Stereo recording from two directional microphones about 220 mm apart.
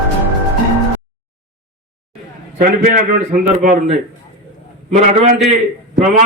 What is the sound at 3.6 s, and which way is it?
Speech, 45° right (ahead or behind).